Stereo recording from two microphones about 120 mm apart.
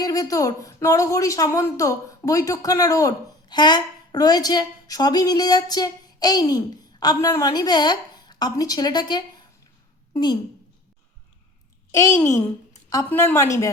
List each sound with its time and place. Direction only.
0.0 s a woman's voice: 30° left (ahead or behind)
11.9 s a woman's voice: 25° left (ahead or behind)
13.3 s a woman's voice: 25° left (ahead or behind)